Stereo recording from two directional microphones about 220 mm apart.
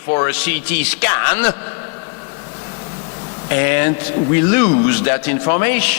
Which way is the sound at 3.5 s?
15° left (ahead or behind).